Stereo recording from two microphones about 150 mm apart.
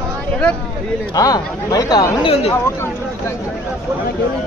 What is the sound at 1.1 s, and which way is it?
Speech, 25° left (ahead or behind).